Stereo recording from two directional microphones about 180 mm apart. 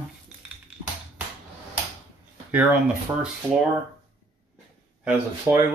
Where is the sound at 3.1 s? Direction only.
10° right (ahead or behind).